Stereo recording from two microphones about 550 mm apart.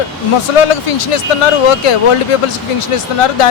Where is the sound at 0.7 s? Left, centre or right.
Left.